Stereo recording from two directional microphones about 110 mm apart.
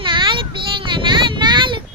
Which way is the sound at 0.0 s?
50° right (ahead or behind).